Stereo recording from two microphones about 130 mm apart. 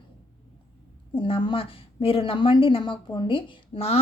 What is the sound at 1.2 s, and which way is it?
A woman's voice, 40° left (ahead or behind).